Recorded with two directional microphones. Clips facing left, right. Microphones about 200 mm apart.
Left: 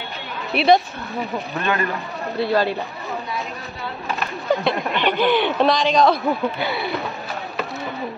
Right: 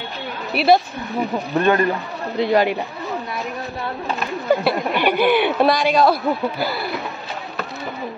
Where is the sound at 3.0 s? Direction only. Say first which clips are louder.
Right 2 dB; centre (ahead or behind).